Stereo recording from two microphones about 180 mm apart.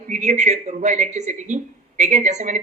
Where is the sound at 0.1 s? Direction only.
40° right (ahead or behind).